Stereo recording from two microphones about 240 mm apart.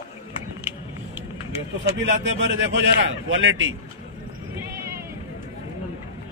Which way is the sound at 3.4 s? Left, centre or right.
Right.